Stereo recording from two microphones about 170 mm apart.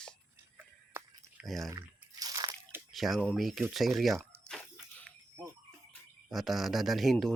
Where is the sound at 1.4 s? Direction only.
Centre (ahead or behind).